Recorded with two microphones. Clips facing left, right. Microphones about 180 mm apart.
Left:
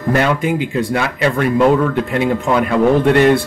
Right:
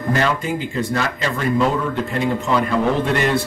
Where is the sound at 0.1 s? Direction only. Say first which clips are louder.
Left 5 dB; 60° left (ahead or behind).